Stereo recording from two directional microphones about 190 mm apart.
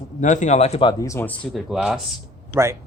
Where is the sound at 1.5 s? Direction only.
Centre (ahead or behind).